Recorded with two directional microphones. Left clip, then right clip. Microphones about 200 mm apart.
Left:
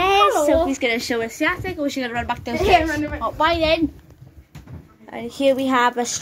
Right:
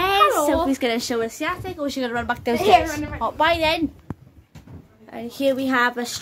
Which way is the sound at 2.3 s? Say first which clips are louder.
Right 3 dB; 30° right (ahead or behind).